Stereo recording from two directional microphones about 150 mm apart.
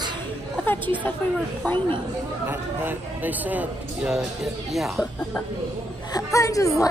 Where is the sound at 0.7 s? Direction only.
10° left (ahead or behind).